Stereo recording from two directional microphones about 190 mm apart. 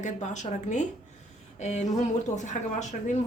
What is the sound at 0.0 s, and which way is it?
A woman's voice, 40° left (ahead or behind).